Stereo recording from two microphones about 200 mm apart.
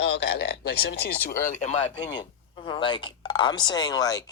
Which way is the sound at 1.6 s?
35° left (ahead or behind).